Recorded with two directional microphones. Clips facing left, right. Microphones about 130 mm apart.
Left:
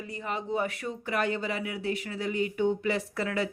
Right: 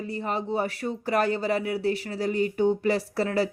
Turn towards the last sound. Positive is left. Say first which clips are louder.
# right 5 dB
turn(degrees=-35)  # may be behind; listen again after turning